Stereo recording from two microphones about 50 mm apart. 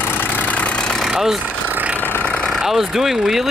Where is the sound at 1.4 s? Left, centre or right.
Right.